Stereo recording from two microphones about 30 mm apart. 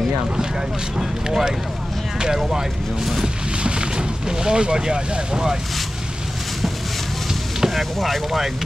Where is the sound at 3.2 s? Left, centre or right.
Right.